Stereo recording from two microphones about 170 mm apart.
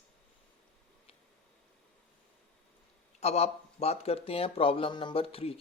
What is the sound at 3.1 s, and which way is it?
Speech, 40° left (ahead or behind).